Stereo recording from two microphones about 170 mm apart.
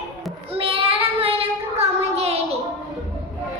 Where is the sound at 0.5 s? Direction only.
35° right (ahead or behind).